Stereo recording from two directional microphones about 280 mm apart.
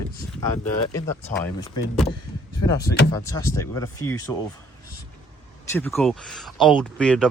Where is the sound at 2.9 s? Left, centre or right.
Left.